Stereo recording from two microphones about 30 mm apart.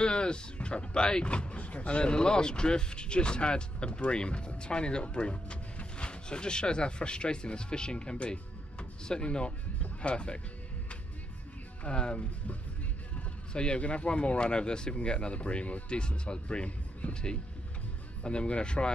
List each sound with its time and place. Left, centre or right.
0.0 s speech: left
11.8 s speech: left
13.5 s speech: left